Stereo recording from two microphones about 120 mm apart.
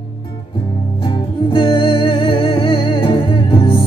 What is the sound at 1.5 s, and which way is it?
Music, 40° left (ahead or behind).